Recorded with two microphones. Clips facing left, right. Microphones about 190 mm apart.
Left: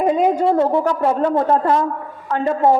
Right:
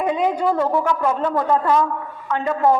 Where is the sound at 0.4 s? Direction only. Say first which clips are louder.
Left 3 dB; 25° left (ahead or behind).